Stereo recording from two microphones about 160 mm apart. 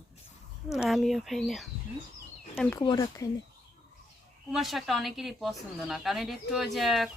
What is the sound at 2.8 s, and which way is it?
Speech, 25° left (ahead or behind).